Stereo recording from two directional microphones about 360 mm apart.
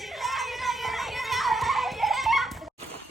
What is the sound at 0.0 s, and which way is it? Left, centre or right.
Music, centre.